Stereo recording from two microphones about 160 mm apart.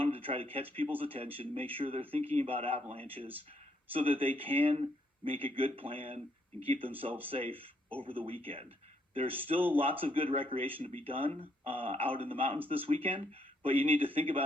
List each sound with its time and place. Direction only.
0.0 s speech: 35° right (ahead or behind)